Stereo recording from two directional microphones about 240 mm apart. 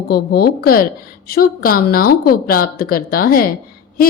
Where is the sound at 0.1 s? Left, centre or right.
Left.